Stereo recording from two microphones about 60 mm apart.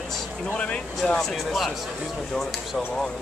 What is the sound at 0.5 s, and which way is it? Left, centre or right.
Speech, centre.